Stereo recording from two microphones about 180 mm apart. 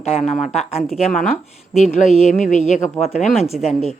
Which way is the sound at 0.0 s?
35° left (ahead or behind).